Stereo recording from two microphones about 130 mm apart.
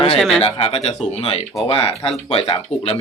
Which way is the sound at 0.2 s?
Centre (ahead or behind).